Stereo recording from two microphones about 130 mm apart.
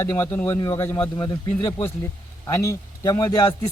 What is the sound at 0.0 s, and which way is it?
Speech, 20° left (ahead or behind).